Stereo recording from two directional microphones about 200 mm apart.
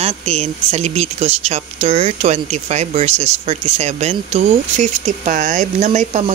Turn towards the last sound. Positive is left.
turn(degrees=-35)  # may be behind; listen again after turning